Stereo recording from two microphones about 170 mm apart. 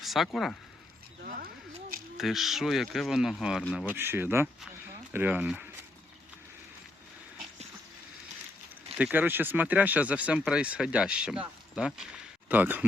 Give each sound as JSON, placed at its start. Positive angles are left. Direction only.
{"t": 0.0, "sound": "speech", "side_deg": 0}
{"t": 1.2, "sound": "a sound", "side_deg": -60}
{"t": 2.1, "sound": "speech", "side_deg": 0}
{"t": 3.8, "sound": "speech", "side_deg": -15}
{"t": 9.0, "sound": "speech", "side_deg": -10}